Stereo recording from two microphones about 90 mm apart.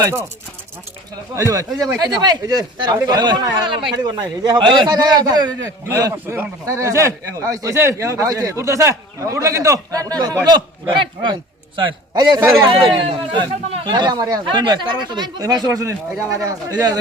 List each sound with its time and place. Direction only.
0.0 s speech: 35° right (ahead or behind)
1.4 s a man's voice: 40° right (ahead or behind)
5.9 s speech: 40° right (ahead or behind)
6.2 s speech: 25° right (ahead or behind)
6.7 s speech: 35° right (ahead or behind)
10.8 s speech: 65° right (ahead or behind)
11.8 s a man's voice: 50° right (ahead or behind)
12.6 s speech: 70° right (ahead or behind); by 14.4 s 45° right (ahead or behind)
14.4 s a man's voice: 60° right (ahead or behind); by 17.0 s 45° right (ahead or behind)